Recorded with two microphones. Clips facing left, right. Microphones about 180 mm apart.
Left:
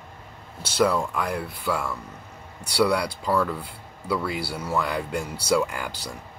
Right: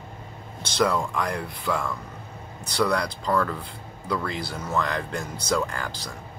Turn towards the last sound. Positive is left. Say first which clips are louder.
# left 2 dB
turn(degrees=10)  # may be behind; listen again after turning